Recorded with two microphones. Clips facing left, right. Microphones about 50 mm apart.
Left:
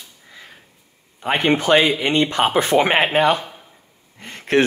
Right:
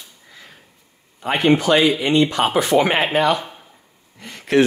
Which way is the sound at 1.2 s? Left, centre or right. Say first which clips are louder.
Right 1 dB; left.